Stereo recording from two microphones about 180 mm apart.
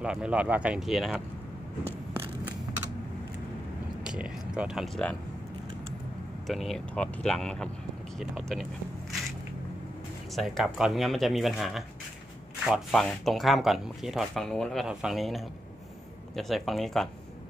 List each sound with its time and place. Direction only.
0.0 s speech: 5° right (ahead or behind)
4.0 s a sound: 5° right (ahead or behind)
6.4 s speech: centre (ahead or behind)
10.3 s speech: centre (ahead or behind)